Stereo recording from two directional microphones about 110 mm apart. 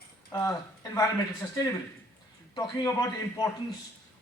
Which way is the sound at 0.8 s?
35° left (ahead or behind).